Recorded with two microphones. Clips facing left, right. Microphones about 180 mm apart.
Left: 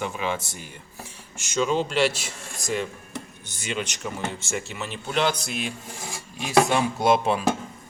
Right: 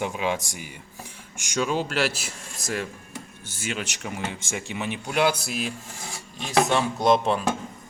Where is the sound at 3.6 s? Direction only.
5° right (ahead or behind).